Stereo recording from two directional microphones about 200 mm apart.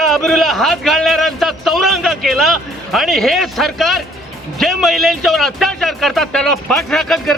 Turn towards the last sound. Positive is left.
turn(degrees=0)  # may be behind; listen again after turning